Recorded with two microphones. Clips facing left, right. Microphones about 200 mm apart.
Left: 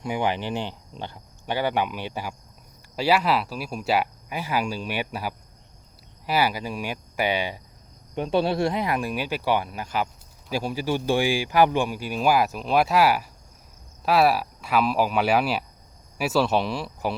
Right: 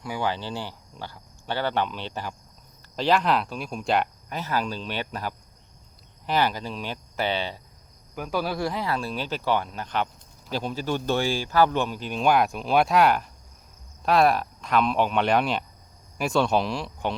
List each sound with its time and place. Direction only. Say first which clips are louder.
0.0 s speech: left 3 dB; 20° left (ahead or behind)
8.1 s speech: left 5 dB; 25° left (ahead or behind); by 17.2 s 5° left (ahead or behind)